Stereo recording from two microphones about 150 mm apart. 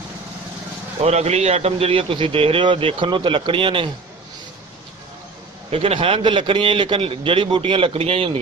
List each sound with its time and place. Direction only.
1.0 s a man's voice: 45° right (ahead or behind)
5.7 s a man's voice: 40° right (ahead or behind)